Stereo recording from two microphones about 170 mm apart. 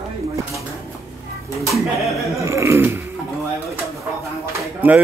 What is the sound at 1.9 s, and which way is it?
Speech, centre (ahead or behind).